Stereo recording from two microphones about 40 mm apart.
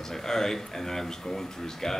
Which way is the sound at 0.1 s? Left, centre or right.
Centre.